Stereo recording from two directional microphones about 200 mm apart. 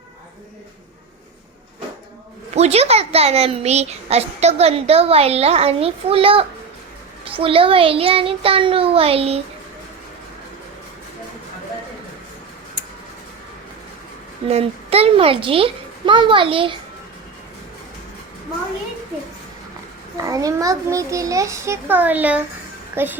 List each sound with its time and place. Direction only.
2.6 s a child's voice: 30° right (ahead or behind)
14.4 s a child's voice: 30° right (ahead or behind)
20.2 s a child's voice: 15° right (ahead or behind)